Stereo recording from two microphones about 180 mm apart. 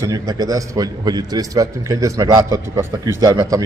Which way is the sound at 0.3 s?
20° right (ahead or behind).